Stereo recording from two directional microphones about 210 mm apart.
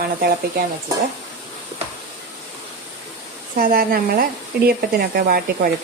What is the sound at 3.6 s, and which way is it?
Speech, 45° right (ahead or behind).